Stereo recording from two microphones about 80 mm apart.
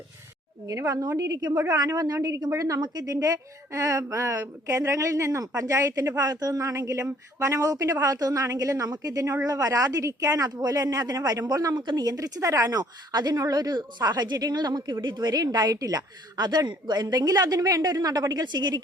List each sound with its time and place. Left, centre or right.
0.7 s a woman's voice: right